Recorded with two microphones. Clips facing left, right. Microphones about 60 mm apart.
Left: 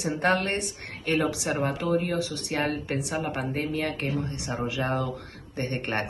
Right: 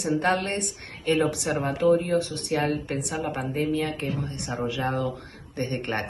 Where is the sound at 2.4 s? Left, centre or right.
Left.